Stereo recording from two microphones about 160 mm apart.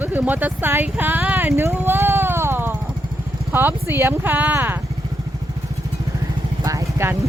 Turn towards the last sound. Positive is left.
turn(degrees=-15)  # may be behind; listen again after turning